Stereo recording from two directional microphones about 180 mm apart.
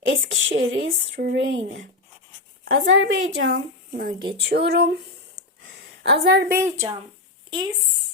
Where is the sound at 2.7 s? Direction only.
90° right.